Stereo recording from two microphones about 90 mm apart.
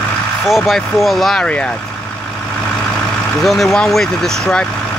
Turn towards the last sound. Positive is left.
turn(degrees=5)  # may be behind; listen again after turning